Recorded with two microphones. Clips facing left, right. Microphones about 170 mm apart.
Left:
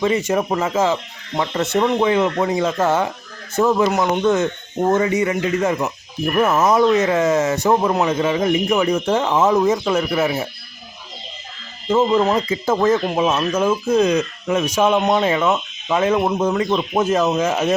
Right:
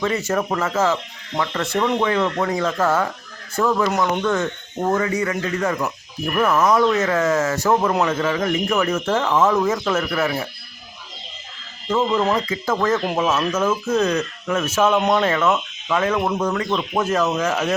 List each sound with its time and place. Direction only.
0.0 s speech: 15° left (ahead or behind)
11.9 s speech: 20° left (ahead or behind)